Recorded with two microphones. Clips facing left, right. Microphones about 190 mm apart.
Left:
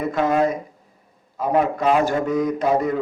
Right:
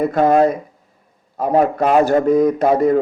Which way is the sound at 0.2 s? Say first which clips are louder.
Right 6 dB; 40° right (ahead or behind).